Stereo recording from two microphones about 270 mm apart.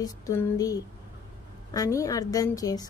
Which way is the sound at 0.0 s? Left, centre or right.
Centre.